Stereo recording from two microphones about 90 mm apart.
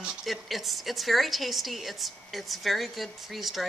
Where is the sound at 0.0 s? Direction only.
Centre (ahead or behind).